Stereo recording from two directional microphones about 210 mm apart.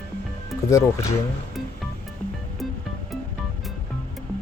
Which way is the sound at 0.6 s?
15° left (ahead or behind).